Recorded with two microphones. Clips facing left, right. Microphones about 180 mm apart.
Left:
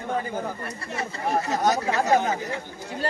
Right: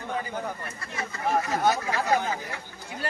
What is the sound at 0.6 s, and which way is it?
Speech, 30° left (ahead or behind).